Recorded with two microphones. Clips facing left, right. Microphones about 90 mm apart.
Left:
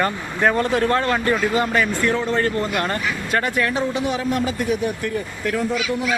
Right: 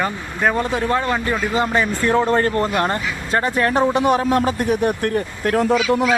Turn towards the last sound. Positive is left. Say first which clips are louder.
# right 6 dB
turn(degrees=-80)